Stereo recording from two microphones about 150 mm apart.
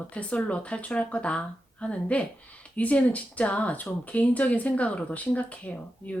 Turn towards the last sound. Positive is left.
turn(degrees=10)  # may be behind; listen again after turning